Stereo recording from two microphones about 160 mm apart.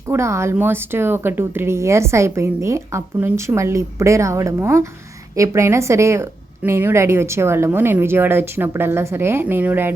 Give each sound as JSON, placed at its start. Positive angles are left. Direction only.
{"t": 0.1, "sound": "speech", "side_deg": -15}